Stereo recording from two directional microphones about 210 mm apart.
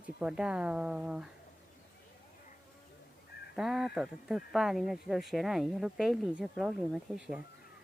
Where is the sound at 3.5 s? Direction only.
Centre (ahead or behind).